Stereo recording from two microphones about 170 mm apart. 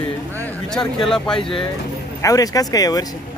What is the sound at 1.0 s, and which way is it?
Speech, 5° left (ahead or behind).